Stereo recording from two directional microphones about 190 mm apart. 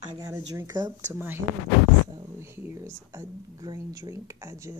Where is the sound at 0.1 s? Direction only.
20° right (ahead or behind).